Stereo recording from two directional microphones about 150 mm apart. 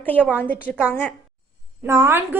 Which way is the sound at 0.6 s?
10° right (ahead or behind).